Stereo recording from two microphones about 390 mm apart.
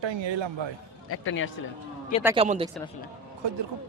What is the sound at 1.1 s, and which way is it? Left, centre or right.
Speech, left.